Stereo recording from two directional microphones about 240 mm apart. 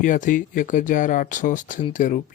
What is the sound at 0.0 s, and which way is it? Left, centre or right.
Speech, left.